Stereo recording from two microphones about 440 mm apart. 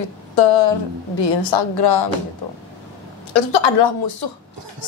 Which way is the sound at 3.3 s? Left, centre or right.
Left.